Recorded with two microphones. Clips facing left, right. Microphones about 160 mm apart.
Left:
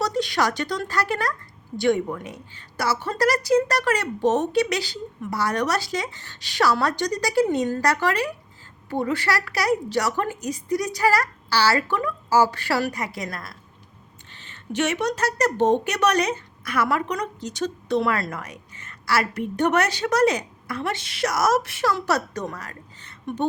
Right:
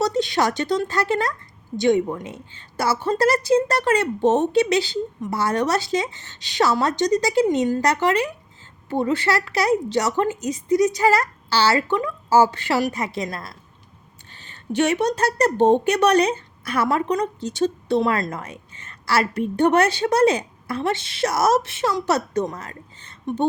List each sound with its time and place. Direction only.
0.0 s a woman's voice: 25° right (ahead or behind)